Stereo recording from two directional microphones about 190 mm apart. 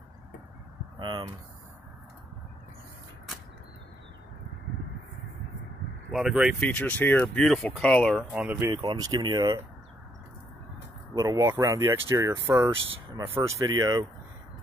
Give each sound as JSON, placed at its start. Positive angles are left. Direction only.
{"t": 0.9, "sound": "speech", "side_deg": -25}
{"t": 6.1, "sound": "speech", "side_deg": -5}
{"t": 6.6, "sound": "speech", "side_deg": 10}
{"t": 8.3, "sound": "speech", "side_deg": -5}
{"t": 8.6, "sound": "speech", "side_deg": -25}
{"t": 11.1, "sound": "speech", "side_deg": -15}